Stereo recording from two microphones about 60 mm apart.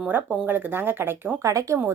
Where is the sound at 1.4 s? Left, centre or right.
Right.